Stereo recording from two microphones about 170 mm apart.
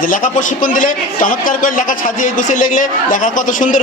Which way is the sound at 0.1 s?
50° left (ahead or behind).